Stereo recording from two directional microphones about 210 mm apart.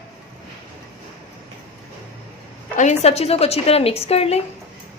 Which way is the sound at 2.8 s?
35° left (ahead or behind).